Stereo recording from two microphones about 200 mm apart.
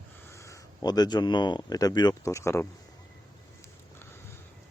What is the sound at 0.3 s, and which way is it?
Speech, 15° left (ahead or behind).